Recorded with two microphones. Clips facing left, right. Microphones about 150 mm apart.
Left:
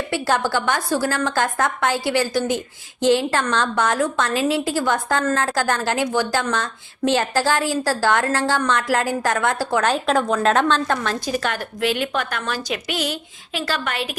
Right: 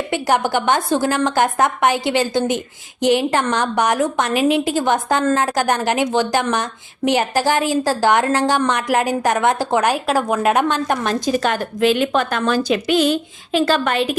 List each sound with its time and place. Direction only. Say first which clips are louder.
0.1 s a woman's voice: right 3 dB; 20° right (ahead or behind)